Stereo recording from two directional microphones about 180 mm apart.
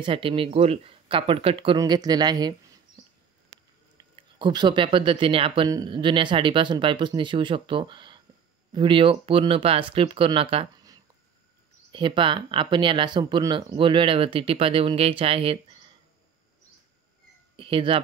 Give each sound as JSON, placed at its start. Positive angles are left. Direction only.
{"t": 0.0, "sound": "speech", "side_deg": -30}
{"t": 1.8, "sound": "speech", "side_deg": -20}
{"t": 4.0, "sound": "speech", "side_deg": -25}
{"t": 11.9, "sound": "speech", "side_deg": -25}
{"t": 17.6, "sound": "speech", "side_deg": -30}